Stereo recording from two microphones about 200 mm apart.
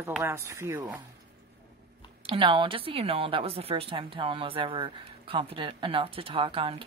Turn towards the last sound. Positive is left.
turn(degrees=-25)  # may be behind; listen again after turning